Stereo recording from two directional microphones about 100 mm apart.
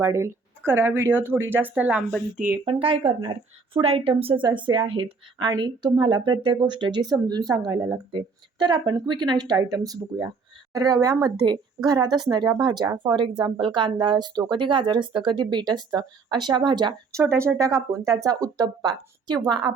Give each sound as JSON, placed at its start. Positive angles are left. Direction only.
{"t": 0.0, "sound": "speech", "side_deg": -25}
{"t": 2.6, "sound": "a woman's voice", "side_deg": -65}
{"t": 4.4, "sound": "a woman's voice", "side_deg": -50}
{"t": 5.5, "sound": "speech", "side_deg": -45}
{"t": 17.2, "sound": "speech", "side_deg": -30}